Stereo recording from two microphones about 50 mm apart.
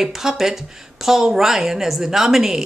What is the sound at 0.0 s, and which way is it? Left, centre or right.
Speech, centre.